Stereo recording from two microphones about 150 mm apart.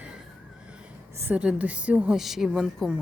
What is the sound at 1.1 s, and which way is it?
A woman's voice, 15° right (ahead or behind).